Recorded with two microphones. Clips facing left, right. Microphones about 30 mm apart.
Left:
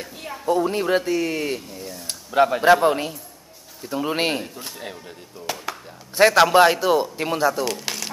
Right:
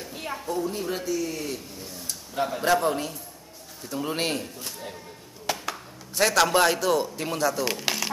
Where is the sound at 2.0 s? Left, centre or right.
Left.